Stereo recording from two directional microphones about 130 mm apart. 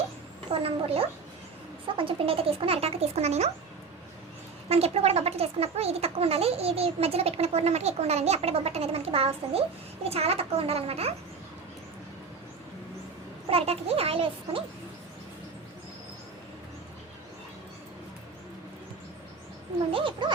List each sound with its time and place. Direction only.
0.5 s speech: 45° right (ahead or behind)
4.7 s speech: 50° right (ahead or behind)
13.5 s speech: 50° right (ahead or behind)
19.9 s speech: 40° right (ahead or behind)